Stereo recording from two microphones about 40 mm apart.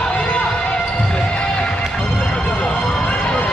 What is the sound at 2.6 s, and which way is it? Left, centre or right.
Emergency vehicle, left.